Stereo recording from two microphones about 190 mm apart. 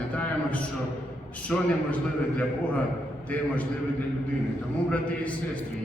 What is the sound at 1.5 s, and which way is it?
Speech, 10° left (ahead or behind).